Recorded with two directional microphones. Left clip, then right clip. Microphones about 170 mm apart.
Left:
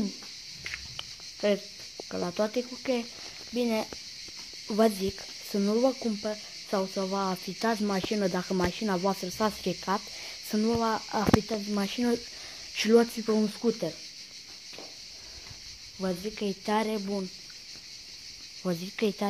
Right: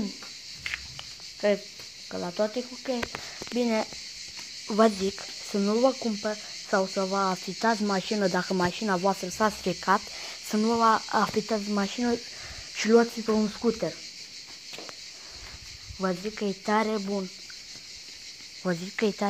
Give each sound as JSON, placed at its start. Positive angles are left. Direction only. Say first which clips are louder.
{"t": 1.4, "sound": "speech", "louder": "right 2 dB", "side_deg": 35}
{"t": 3.5, "sound": "speech", "louder": "right 2 dB", "side_deg": 5}
{"t": 11.4, "sound": "cricket", "louder": "right 4 dB", "side_deg": -5}
{"t": 11.8, "sound": "speech", "louder": "right 1 dB", "side_deg": 20}
{"t": 16.0, "sound": "speech", "louder": "right 3 dB", "side_deg": 5}
{"t": 18.6, "sound": "speech", "louder": "right 2 dB", "side_deg": 10}